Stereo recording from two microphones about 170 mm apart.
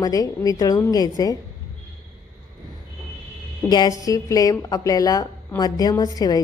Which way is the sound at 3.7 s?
20° left (ahead or behind).